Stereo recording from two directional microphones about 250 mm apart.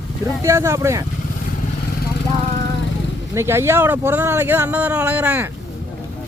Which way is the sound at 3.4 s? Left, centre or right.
Centre.